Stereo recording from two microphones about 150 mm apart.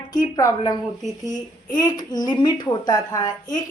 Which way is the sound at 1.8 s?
25° left (ahead or behind).